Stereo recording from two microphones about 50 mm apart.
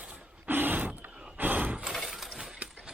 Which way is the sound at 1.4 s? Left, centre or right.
Right.